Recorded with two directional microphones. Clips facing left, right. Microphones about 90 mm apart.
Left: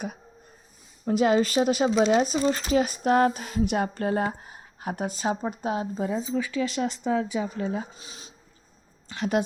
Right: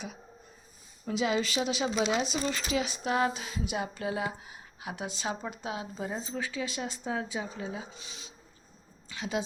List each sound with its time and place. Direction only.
1.0 s speech: 50° left (ahead or behind)
6.1 s speech: 55° left (ahead or behind)
7.9 s speech: 40° left (ahead or behind)
9.1 s speech: 55° left (ahead or behind)